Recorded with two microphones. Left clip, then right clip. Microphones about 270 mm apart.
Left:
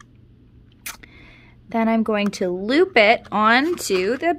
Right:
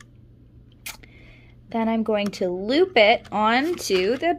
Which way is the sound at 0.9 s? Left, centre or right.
Centre.